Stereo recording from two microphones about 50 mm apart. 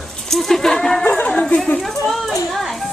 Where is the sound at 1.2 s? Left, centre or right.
Centre.